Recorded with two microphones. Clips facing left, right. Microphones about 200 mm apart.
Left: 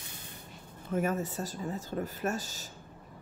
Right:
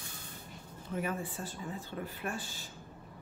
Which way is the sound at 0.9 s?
45° left (ahead or behind).